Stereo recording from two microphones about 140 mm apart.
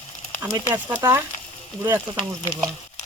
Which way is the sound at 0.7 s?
20° right (ahead or behind).